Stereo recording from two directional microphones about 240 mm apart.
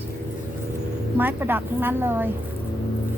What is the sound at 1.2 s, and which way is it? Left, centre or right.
Speech, centre.